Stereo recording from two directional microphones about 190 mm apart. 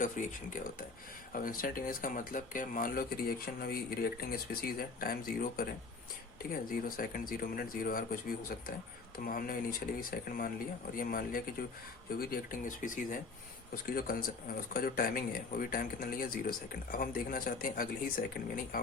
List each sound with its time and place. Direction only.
1.3 s speech: 45° left (ahead or behind)